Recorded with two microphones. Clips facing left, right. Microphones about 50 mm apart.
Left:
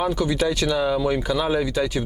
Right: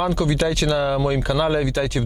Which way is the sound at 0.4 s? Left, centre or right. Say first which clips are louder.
Right 1 dB; right.